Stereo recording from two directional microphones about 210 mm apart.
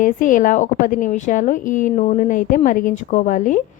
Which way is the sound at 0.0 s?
40° left (ahead or behind).